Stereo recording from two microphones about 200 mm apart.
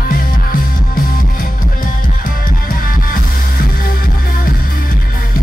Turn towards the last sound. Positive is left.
turn(degrees=45)  # may be behind; listen again after turning